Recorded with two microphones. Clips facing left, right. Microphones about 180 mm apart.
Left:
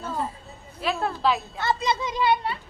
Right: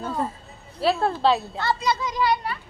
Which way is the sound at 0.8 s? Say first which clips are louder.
Right 5 dB; 30° right (ahead or behind).